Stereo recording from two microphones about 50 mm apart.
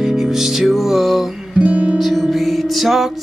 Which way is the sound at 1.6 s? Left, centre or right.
Right.